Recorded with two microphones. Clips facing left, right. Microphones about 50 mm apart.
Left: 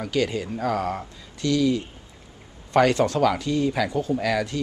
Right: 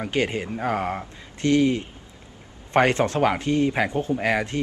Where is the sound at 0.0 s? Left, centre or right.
Right.